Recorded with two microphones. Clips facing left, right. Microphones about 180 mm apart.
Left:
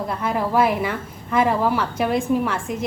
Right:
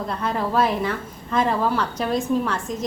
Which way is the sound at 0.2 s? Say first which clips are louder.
Left 2 dB; 10° left (ahead or behind).